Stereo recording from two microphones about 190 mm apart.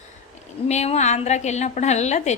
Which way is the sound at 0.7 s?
35° left (ahead or behind).